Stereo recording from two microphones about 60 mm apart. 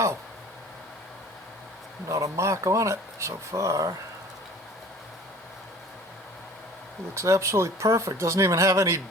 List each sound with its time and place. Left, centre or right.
2.0 s speech: right
7.1 s speech: right